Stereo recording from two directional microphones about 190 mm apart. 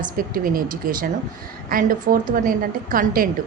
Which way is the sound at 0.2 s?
50° right (ahead or behind).